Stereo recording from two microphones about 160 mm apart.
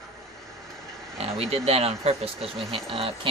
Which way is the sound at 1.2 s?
40° right (ahead or behind).